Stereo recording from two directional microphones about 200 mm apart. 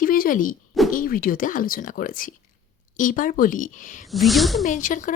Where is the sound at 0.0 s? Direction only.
45° left (ahead or behind).